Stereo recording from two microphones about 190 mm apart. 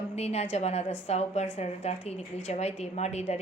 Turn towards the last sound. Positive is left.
turn(degrees=35)  # may be behind; listen again after turning